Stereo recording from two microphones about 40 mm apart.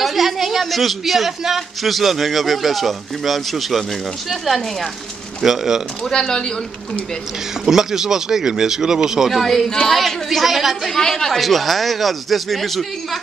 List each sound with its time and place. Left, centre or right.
0.0 s a man's voice: centre
5.4 s speech: centre
6.0 s speech: centre
7.6 s speech: centre
9.3 s a man's voice: centre
11.0 s a man's voice: centre